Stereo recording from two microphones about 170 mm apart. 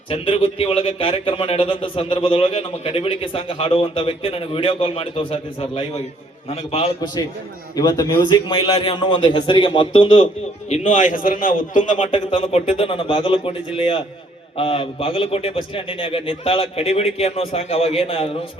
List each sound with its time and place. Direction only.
0.1 s a man's voice: 30° left (ahead or behind)
10.7 s a man's voice: 45° left (ahead or behind)
12.1 s speech: 30° left (ahead or behind)